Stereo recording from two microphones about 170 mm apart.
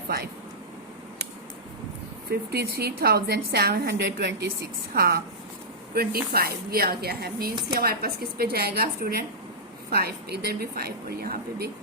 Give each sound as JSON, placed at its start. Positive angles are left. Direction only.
{"t": 2.3, "sound": "a woman's voice", "side_deg": -70}
{"t": 4.9, "sound": "a woman's voice", "side_deg": -70}